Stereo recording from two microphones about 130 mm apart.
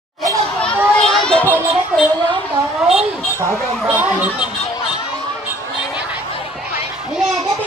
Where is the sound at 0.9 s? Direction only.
5° left (ahead or behind).